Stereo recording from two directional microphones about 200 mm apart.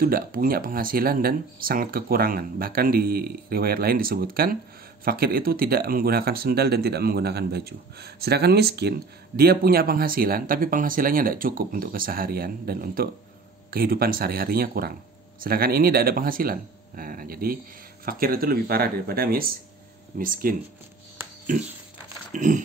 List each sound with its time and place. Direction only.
0.0 s speech: 45° right (ahead or behind)
22.3 s speech: 40° right (ahead or behind)